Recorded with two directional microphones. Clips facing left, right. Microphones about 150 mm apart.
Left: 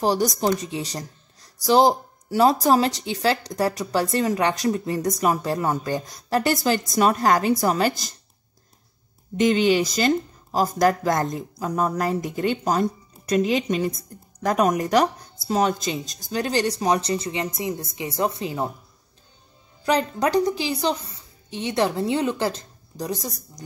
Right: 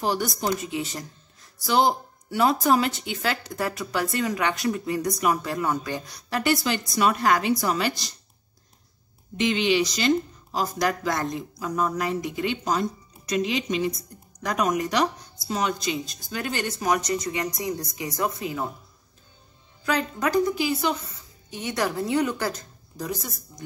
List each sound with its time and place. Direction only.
0.0 s speech: 40° left (ahead or behind)
9.4 s a woman's voice: 40° left (ahead or behind)
19.8 s a woman's voice: 35° left (ahead or behind)